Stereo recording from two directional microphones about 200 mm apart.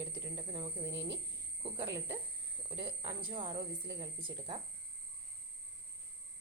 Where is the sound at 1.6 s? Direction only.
20° right (ahead or behind).